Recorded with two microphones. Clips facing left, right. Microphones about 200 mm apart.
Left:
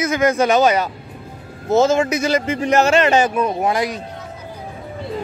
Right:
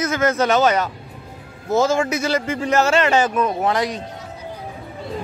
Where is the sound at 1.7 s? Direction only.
25° left (ahead or behind).